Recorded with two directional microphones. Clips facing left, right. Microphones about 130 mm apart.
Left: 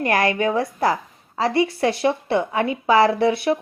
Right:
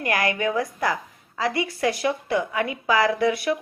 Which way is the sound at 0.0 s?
35° left (ahead or behind).